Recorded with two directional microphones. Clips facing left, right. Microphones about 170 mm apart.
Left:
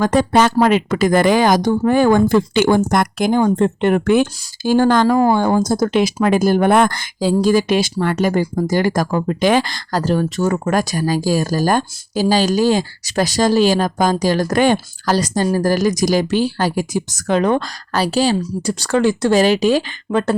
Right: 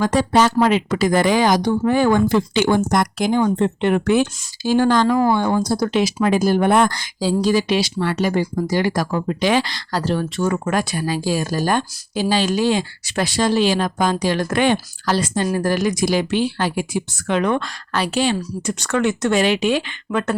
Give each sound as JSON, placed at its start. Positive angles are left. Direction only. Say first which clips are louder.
{"t": 0.0, "sound": "speech", "louder": "left 2 dB", "side_deg": 50}